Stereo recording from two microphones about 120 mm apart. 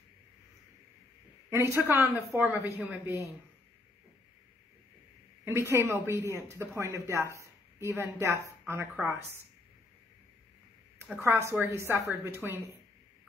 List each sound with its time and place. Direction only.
1.5 s a woman's voice: 20° right (ahead or behind)
5.4 s speech: 20° right (ahead or behind)
11.0 s speech: 20° right (ahead or behind)